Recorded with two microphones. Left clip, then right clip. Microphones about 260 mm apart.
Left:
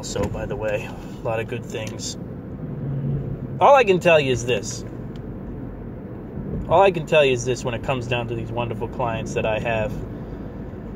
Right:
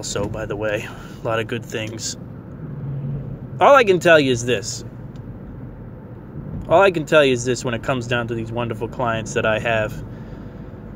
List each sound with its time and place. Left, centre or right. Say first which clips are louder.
0.1 s speech: right 1 dB; right
3.5 s speech: right 2 dB; right
6.7 s speech: right 2 dB; right